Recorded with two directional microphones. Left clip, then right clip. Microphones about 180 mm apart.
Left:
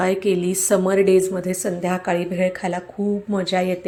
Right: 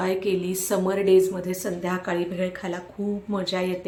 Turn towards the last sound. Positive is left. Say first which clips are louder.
# left 5 dB
turn(degrees=30)  # may be behind; listen again after turning